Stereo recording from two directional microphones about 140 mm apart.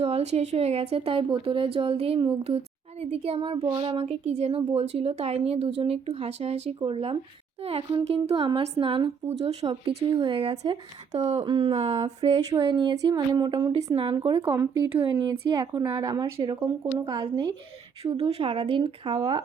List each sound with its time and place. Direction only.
0.0 s speech: 50° right (ahead or behind)
9.8 s speech: 40° right (ahead or behind)
12.5 s speech: 35° right (ahead or behind)
13.7 s speech: 45° right (ahead or behind)
18.0 s speech: 45° right (ahead or behind)